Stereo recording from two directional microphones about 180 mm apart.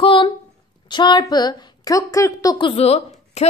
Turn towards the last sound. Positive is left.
turn(degrees=35)  # may be behind; listen again after turning